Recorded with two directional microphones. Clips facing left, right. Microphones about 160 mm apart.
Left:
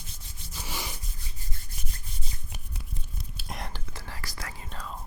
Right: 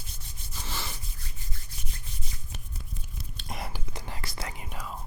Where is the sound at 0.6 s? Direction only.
10° left (ahead or behind).